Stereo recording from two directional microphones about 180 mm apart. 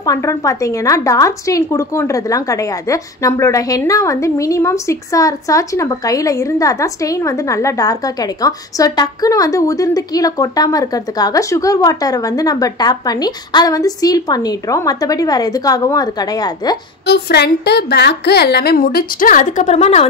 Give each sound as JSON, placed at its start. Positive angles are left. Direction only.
{"t": 0.0, "sound": "a woman's voice", "side_deg": 20}
{"t": 17.0, "sound": "a woman's voice", "side_deg": 65}